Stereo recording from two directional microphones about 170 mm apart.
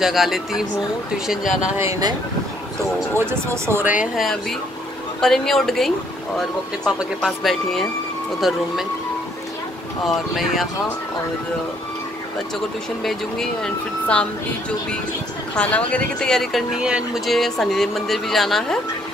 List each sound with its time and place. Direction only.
0.0 s speech: centre (ahead or behind)
1.8 s speech: 20° right (ahead or behind)
3.2 s speech: 15° right (ahead or behind)
4.0 s speech: centre (ahead or behind)
10.0 s speech: centre (ahead or behind)
13.0 s speech: 5° left (ahead or behind)
15.5 s speech: 10° left (ahead or behind)